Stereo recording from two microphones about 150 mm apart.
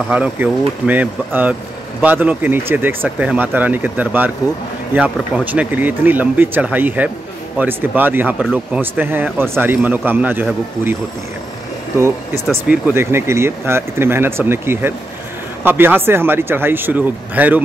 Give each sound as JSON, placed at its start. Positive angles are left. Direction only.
{"t": 0.1, "sound": "speech", "side_deg": -10}
{"t": 12.6, "sound": "speech", "side_deg": -10}